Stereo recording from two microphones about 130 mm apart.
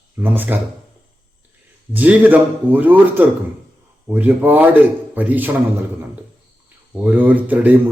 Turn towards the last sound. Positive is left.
turn(degrees=-10)  # may be behind; listen again after turning